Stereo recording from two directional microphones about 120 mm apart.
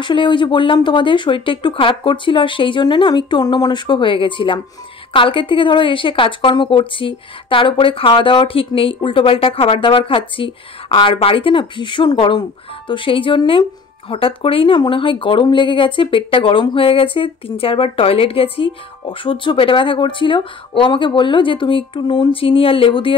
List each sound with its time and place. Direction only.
0.0 s speech: 40° left (ahead or behind)